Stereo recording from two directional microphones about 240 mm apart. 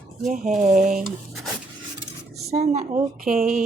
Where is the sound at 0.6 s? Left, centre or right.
Right.